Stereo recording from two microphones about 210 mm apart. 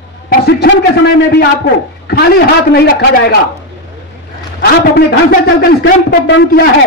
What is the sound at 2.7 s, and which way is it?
Speech, 50° left (ahead or behind).